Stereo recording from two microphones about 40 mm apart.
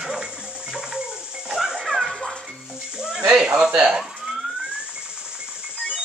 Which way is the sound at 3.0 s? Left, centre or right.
Centre.